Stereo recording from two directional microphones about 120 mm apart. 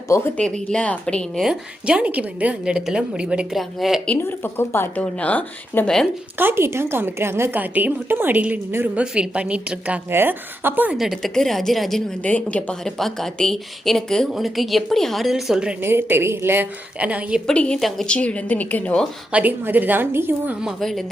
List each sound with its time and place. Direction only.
0.3 s a woman's voice: 5° left (ahead or behind)
1.5 s a woman's voice: 10° right (ahead or behind)
4.0 s a woman's voice: 15° left (ahead or behind)
6.3 s a woman's voice: 20° right (ahead or behind)
10.9 s a woman's voice: centre (ahead or behind)
15.8 s a woman's voice: 20° right (ahead or behind)
17.4 s a woman's voice: 10° left (ahead or behind)
19.3 s a woman's voice: 15° right (ahead or behind)